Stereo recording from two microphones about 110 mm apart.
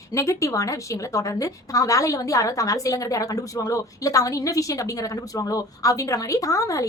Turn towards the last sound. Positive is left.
turn(degrees=30)  # may be behind; listen again after turning